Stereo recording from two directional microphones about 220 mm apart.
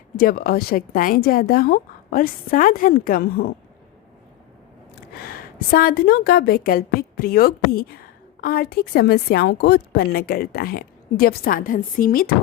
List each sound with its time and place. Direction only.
0.2 s a woman's voice: 45° left (ahead or behind)
5.1 s a woman's voice: 45° left (ahead or behind)